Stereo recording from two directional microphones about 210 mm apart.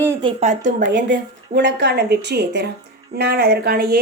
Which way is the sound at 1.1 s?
55° right (ahead or behind).